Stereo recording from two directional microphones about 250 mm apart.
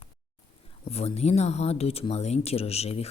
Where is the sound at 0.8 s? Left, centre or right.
Left.